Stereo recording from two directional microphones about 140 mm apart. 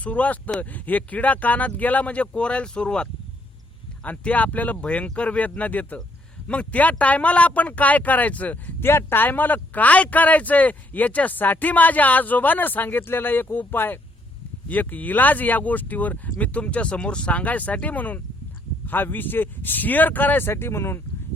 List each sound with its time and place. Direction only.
0.0 s speech: 10° left (ahead or behind)